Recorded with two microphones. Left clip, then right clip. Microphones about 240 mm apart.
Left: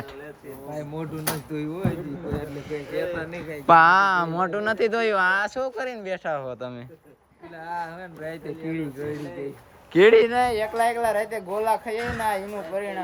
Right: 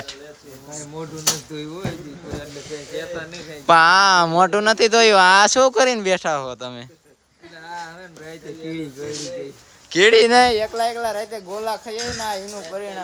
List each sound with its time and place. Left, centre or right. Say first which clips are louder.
1.5 s speech: left 1 dB; centre
8.3 s a man's voice: right 1 dB; centre
10.3 s speech: right 8 dB; right
10.6 s speech: right 1 dB; centre